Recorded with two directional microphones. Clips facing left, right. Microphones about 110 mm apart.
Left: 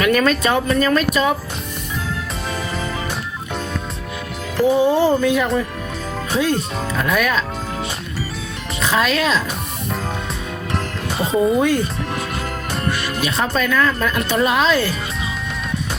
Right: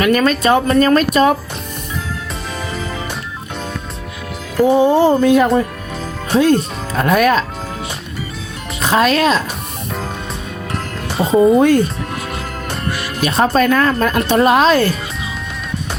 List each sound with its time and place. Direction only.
0.0 s speech: 25° right (ahead or behind)
0.8 s speech: 45° right (ahead or behind)
4.6 s speech: 30° right (ahead or behind)
5.2 s speech: 45° right (ahead or behind)
6.3 s speech: 35° right (ahead or behind)
8.8 s speech: 40° right (ahead or behind)
11.2 s speech: 35° right (ahead or behind)
11.5 s speech: 45° right (ahead or behind)
13.2 s speech: 40° right (ahead or behind)